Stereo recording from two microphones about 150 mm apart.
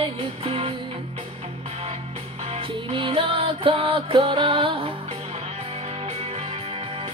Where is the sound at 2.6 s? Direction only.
35° right (ahead or behind).